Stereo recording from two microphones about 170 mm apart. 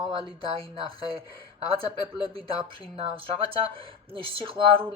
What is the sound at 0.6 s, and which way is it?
Speech, 30° right (ahead or behind).